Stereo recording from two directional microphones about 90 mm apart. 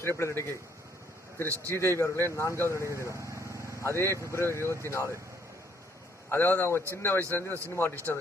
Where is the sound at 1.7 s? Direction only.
30° left (ahead or behind).